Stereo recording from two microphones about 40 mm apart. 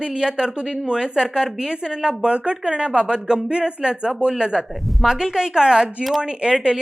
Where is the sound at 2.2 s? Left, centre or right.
Right.